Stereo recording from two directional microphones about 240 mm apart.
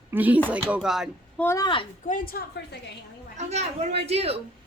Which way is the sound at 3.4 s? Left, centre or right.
Right.